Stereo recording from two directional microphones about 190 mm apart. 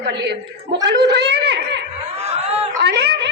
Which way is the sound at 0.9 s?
60° right (ahead or behind).